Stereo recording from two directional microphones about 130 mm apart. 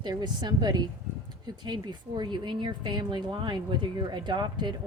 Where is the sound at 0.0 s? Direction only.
35° right (ahead or behind).